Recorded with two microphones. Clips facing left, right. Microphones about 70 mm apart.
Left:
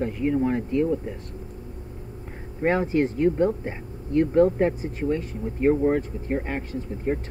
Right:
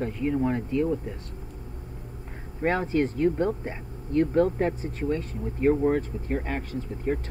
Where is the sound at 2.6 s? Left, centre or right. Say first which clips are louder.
Left 3 dB; left.